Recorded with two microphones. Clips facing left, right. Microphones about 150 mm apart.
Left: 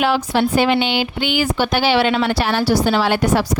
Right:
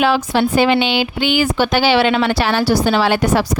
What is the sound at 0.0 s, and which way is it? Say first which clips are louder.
A woman's voice: right 2 dB; 90° right.